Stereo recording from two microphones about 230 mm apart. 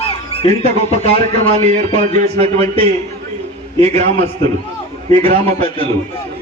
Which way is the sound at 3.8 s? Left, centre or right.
Right.